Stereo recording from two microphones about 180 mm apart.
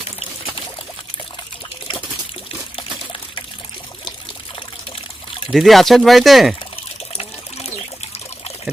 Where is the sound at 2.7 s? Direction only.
30° left (ahead or behind).